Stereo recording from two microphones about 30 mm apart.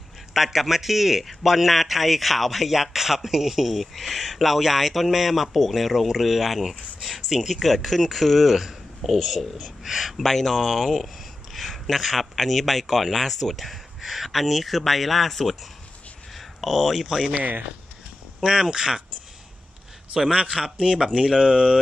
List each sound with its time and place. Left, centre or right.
0.3 s speech: centre
8.5 s a man's voice: centre
10.2 s speech: centre
18.4 s speech: right
20.2 s speech: right